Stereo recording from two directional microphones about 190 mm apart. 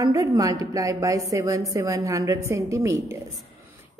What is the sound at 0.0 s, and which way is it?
A woman's voice, 20° right (ahead or behind).